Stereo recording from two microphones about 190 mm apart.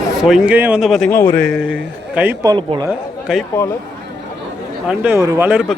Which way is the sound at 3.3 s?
5° right (ahead or behind).